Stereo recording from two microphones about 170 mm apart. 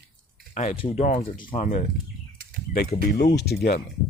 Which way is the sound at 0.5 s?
45° left (ahead or behind).